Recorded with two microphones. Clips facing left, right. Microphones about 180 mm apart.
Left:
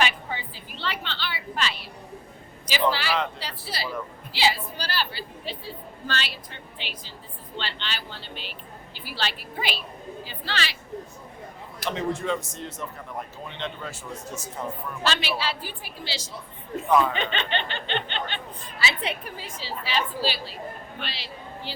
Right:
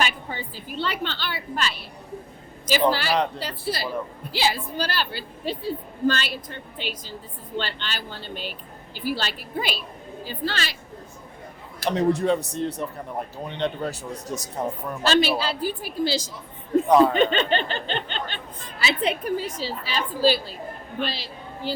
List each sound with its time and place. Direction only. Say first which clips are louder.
0.0 s a woman's voice: even; 45° right (ahead or behind)
11.9 s a woman's voice: right 6 dB; 40° right (ahead or behind)